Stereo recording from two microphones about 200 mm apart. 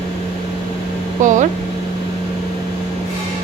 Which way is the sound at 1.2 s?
40° right (ahead or behind).